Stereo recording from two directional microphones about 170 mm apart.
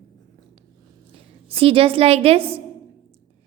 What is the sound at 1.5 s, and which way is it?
A woman's voice, 35° right (ahead or behind).